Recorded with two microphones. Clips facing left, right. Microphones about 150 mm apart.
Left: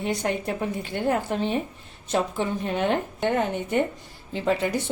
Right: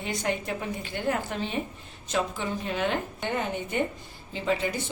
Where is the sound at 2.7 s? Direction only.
55° left (ahead or behind).